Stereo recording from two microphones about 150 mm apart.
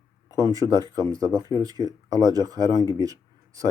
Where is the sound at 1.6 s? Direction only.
25° right (ahead or behind).